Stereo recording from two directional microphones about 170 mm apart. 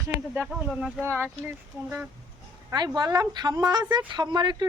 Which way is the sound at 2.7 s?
25° right (ahead or behind).